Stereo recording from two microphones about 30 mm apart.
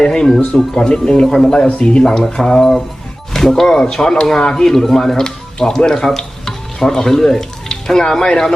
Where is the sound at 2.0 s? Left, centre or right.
Centre.